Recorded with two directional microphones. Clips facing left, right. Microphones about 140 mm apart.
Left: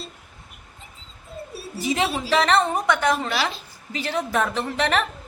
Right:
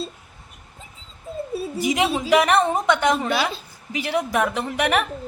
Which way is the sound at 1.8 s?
15° right (ahead or behind).